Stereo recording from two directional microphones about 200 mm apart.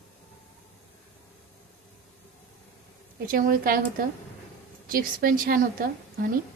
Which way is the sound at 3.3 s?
45° right (ahead or behind).